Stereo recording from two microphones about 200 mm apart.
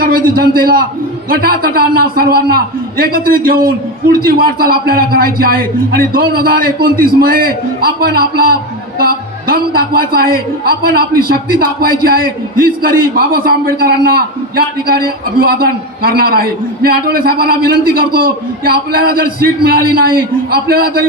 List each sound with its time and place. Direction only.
0.0 s a man's voice: 45° right (ahead or behind)